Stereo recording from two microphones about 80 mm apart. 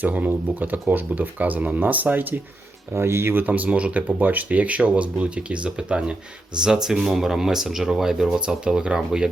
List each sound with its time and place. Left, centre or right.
0.0 s speech: right